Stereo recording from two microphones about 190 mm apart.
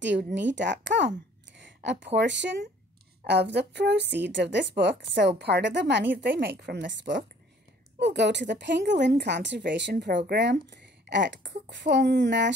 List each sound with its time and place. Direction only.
0.0 s a woman's voice: 70° right (ahead or behind)
6.2 s a woman's voice: 55° right (ahead or behind)